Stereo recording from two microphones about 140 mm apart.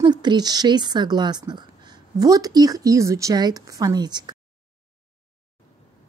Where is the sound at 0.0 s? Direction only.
30° right (ahead or behind).